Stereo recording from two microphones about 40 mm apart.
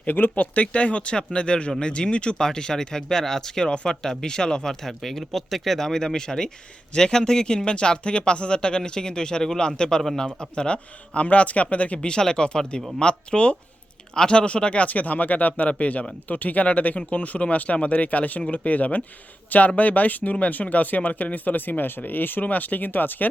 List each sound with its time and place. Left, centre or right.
0.3 s speech: left
12.0 s speech: centre; by 23.3 s left